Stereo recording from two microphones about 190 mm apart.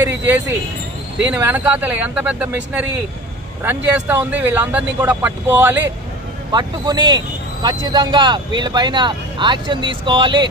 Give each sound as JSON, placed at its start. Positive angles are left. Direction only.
{"t": 0.2, "sound": "speech", "side_deg": -10}
{"t": 6.5, "sound": "speech", "side_deg": -20}